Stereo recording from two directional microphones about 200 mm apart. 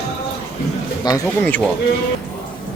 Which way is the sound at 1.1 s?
20° left (ahead or behind).